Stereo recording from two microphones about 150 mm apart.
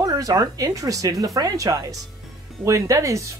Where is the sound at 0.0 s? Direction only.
25° right (ahead or behind).